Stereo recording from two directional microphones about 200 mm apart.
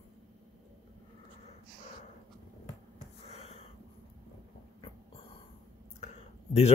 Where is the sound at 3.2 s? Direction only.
30° left (ahead or behind).